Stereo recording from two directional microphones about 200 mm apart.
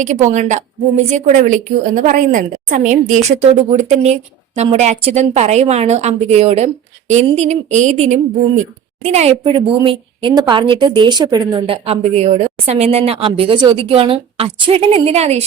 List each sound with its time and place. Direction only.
0.0 s a woman's voice: 35° right (ahead or behind)